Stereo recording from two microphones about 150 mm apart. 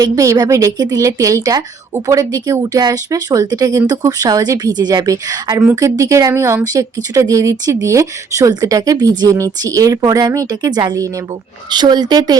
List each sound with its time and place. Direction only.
0.0 s speech: 25° right (ahead or behind)